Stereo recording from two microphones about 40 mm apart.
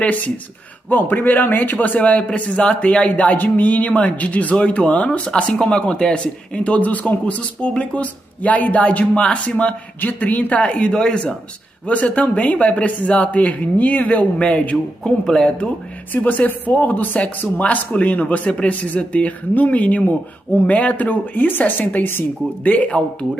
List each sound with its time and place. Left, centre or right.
0.0 s speech: left
0.8 s a man's voice: left
3.3 s speech: left
4.6 s a man's voice: left
4.8 s speech: left
9.9 s a man's voice: left
10.6 s a man's voice: left
11.8 s speech: left
14.4 s a man's voice: left
15.2 s speech: centre
16.1 s a man's voice: left
22.6 s speech: left